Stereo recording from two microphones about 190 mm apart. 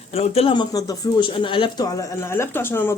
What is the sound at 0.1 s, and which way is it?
Speech, 30° left (ahead or behind).